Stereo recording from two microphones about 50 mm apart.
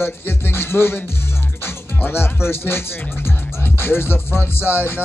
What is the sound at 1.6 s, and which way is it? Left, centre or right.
Music, left.